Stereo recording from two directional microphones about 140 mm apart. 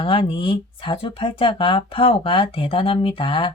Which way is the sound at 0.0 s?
40° left (ahead or behind).